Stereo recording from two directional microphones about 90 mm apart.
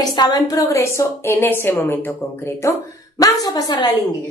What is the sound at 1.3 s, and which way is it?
Speech, 25° left (ahead or behind).